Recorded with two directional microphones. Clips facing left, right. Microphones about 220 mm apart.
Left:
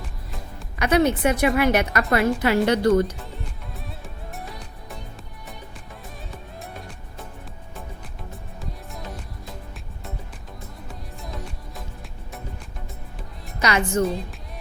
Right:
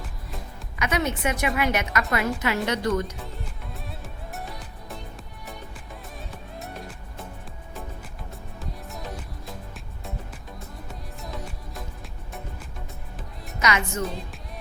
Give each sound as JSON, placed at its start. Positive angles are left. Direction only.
{"t": 0.8, "sound": "a woman's voice", "side_deg": 35}
{"t": 3.2, "sound": "music", "side_deg": 0}
{"t": 6.3, "sound": "music", "side_deg": 0}
{"t": 8.9, "sound": "music", "side_deg": 0}
{"t": 10.8, "sound": "music", "side_deg": 0}
{"t": 13.6, "sound": "a woman's voice", "side_deg": 35}
{"t": 14.1, "sound": "music", "side_deg": 0}